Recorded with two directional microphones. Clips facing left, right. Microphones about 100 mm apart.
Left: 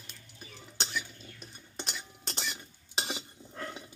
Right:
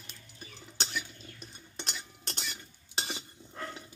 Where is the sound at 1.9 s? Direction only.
5° left (ahead or behind).